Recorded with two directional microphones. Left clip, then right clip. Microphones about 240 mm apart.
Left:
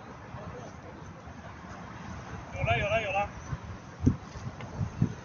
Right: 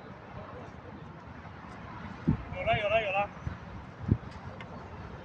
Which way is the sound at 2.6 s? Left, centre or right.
Right.